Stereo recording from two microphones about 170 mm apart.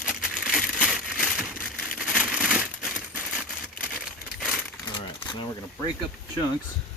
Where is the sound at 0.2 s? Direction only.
5° right (ahead or behind).